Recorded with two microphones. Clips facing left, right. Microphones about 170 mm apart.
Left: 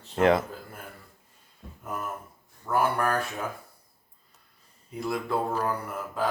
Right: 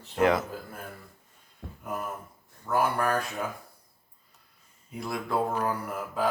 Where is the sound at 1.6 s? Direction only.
75° right (ahead or behind).